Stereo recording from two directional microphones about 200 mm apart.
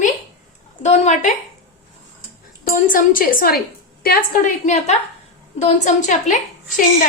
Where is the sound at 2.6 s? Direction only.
45° left (ahead or behind).